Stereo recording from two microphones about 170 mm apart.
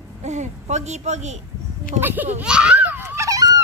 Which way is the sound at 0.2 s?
45° right (ahead or behind).